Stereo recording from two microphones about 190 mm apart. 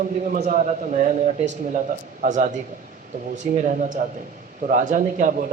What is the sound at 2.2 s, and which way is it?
Speech, 40° right (ahead or behind).